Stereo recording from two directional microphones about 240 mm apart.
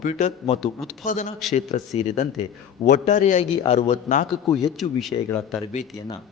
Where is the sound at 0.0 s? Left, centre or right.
Left.